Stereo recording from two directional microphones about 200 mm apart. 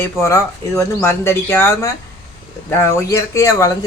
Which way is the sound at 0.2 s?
15° left (ahead or behind).